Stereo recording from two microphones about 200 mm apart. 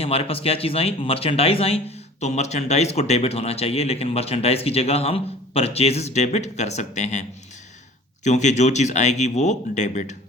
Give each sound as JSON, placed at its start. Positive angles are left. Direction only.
{"t": 0.0, "sound": "speech", "side_deg": 30}